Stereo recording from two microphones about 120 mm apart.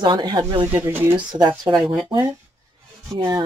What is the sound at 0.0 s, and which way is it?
Speech, 40° right (ahead or behind).